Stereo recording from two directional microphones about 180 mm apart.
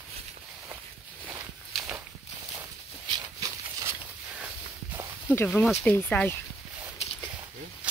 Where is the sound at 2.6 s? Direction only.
20° right (ahead or behind).